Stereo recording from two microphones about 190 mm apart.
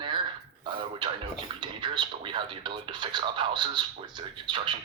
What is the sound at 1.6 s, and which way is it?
Speech, 25° right (ahead or behind).